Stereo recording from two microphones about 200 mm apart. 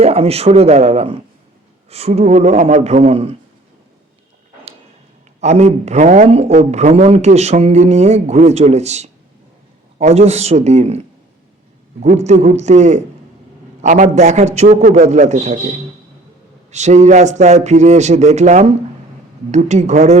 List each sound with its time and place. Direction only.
0.0 s a man's voice: 30° right (ahead or behind)
5.4 s a man's voice: 35° right (ahead or behind)
12.0 s a man's voice: 35° right (ahead or behind)
16.7 s a man's voice: 35° right (ahead or behind)